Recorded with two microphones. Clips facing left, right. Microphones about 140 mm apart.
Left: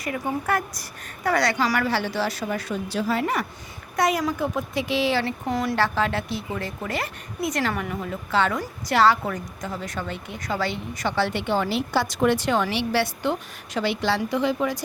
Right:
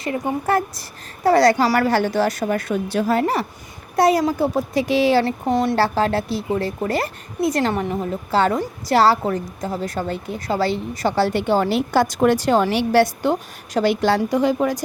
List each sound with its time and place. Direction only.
0.0 s a woman's voice: 30° right (ahead or behind); by 3.2 s 50° right (ahead or behind)
3.9 s a woman's voice: 35° right (ahead or behind)